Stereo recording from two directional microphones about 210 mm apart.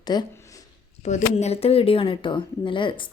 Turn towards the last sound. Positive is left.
turn(degrees=25)  # may be behind; listen again after turning